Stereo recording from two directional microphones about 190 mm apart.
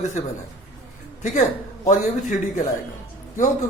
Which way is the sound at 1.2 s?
40° left (ahead or behind).